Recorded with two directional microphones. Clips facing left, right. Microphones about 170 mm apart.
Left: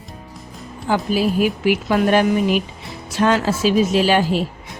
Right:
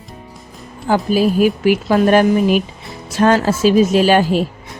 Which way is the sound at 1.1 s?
40° right (ahead or behind).